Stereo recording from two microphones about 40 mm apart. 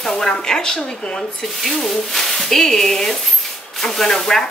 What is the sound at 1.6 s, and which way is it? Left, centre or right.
Speech, centre.